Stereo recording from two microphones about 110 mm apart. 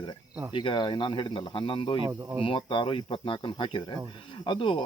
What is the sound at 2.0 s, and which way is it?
Speech, 30° right (ahead or behind).